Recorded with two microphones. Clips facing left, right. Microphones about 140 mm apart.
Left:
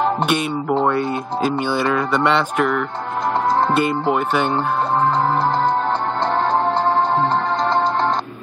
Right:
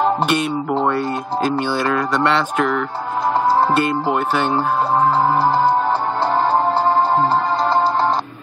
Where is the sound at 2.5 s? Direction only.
Centre (ahead or behind).